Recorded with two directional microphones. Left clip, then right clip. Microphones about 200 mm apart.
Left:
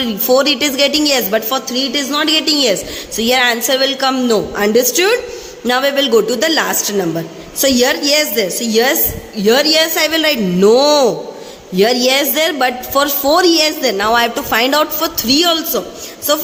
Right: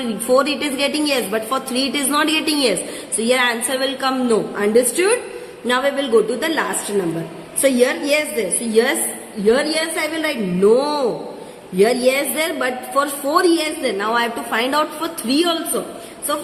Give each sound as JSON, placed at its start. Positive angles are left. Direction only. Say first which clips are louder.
{"t": 0.0, "sound": "a woman's voice", "louder": "left 4 dB", "side_deg": 25}